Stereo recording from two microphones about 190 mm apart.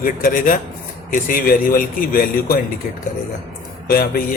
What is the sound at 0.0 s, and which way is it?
Speech, 45° left (ahead or behind).